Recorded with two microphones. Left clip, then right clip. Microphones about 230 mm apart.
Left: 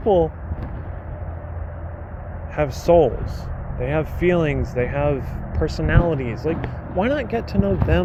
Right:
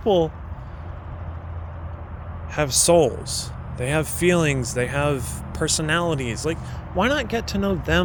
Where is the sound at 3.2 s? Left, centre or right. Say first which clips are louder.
Right 4 dB; right.